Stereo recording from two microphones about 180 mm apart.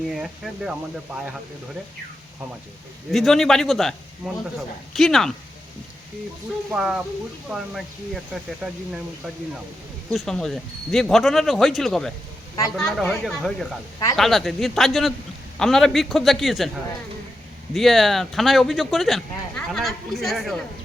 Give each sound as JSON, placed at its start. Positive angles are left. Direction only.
{"t": 0.1, "sound": "speech", "side_deg": 0}
{"t": 3.1, "sound": "speech", "side_deg": 0}
{"t": 6.7, "sound": "speech", "side_deg": -5}
{"t": 17.7, "sound": "speech", "side_deg": 0}